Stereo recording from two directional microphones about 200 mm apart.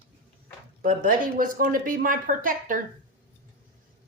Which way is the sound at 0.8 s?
45° right (ahead or behind).